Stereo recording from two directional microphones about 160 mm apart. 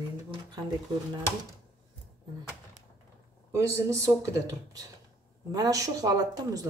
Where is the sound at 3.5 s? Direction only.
20° right (ahead or behind).